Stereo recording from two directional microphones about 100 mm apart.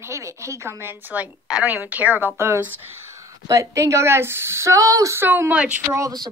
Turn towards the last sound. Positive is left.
turn(degrees=-40)  # may be behind; listen again after turning